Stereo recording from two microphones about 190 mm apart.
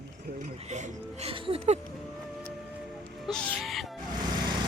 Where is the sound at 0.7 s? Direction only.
40° right (ahead or behind).